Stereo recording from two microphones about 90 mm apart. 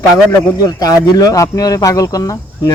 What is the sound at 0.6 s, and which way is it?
Speech, 45° left (ahead or behind).